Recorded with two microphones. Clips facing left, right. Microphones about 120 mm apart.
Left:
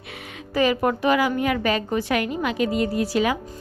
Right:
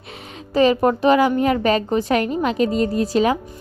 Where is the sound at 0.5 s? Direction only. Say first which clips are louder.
Right 5 dB; 30° right (ahead or behind).